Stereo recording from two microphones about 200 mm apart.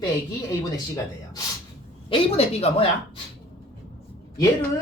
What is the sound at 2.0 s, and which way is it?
Speech, 30° left (ahead or behind).